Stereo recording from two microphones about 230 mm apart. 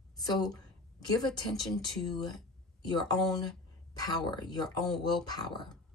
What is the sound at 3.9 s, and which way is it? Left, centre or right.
Speech, centre.